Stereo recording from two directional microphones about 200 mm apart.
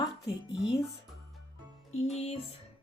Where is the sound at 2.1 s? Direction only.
30° left (ahead or behind).